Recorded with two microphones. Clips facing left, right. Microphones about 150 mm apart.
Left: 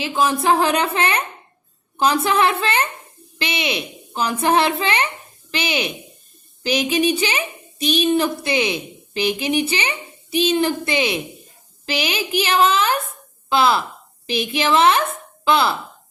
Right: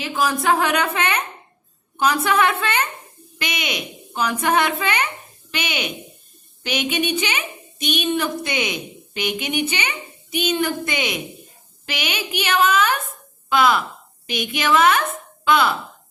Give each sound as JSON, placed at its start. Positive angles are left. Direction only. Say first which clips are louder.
{"t": 0.0, "sound": "a woman's voice", "louder": "left 2 dB", "side_deg": 25}